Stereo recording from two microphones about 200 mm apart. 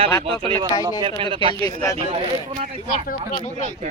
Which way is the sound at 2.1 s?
30° right (ahead or behind).